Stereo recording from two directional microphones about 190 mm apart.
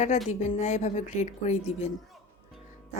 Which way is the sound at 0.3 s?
40° left (ahead or behind).